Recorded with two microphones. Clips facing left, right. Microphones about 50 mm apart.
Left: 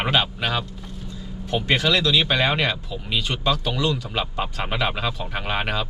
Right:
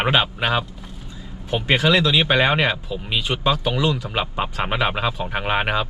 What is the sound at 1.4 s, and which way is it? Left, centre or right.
Speech, centre.